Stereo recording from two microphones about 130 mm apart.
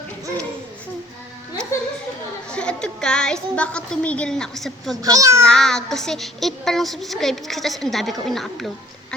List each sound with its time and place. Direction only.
2.5 s music: 5° left (ahead or behind)
5.0 s a child's voice: 25° right (ahead or behind)
5.5 s a woman's voice: 5° left (ahead or behind)